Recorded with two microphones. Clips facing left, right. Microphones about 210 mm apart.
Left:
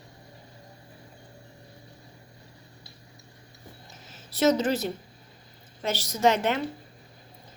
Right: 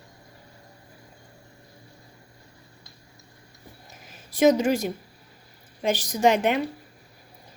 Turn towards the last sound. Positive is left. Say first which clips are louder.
# right 3 dB
turn(degrees=-15)  # may be behind; listen again after turning